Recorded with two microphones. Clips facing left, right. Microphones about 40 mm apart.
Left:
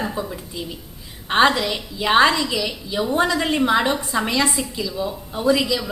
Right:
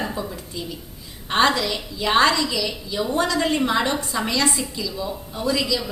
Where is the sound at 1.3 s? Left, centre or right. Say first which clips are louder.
Left 2 dB; centre.